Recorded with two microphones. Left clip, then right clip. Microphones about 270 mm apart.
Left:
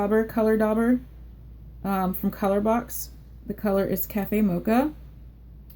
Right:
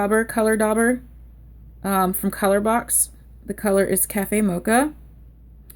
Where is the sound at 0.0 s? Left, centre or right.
Right.